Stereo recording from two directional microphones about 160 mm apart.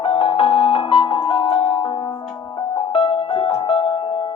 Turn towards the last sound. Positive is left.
turn(degrees=35)  # may be behind; listen again after turning